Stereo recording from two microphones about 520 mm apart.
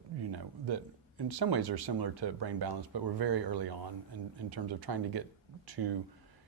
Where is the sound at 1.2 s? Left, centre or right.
Right.